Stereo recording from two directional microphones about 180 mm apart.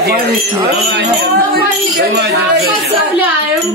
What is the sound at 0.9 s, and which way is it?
Speech, 60° right (ahead or behind).